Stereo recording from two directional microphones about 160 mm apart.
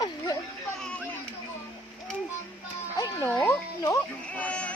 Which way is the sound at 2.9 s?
20° left (ahead or behind).